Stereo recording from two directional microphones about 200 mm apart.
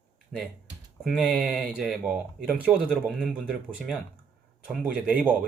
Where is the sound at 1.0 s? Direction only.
Centre (ahead or behind).